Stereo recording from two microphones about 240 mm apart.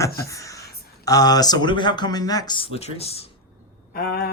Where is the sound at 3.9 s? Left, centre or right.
Left.